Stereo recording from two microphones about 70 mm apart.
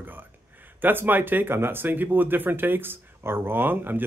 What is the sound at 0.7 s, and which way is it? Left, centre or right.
Speech, right.